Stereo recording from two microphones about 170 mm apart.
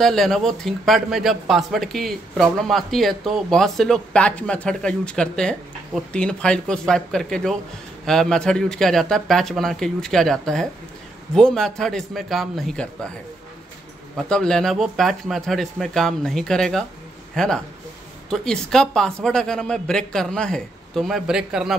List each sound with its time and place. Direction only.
0.0 s speech: centre (ahead or behind)
14.1 s speech: 5° left (ahead or behind)